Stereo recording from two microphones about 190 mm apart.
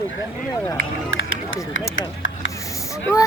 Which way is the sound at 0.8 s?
90° left.